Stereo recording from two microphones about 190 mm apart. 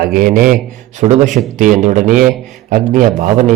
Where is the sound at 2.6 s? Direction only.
45° right (ahead or behind).